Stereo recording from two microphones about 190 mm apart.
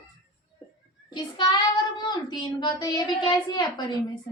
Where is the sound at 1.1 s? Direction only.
25° left (ahead or behind).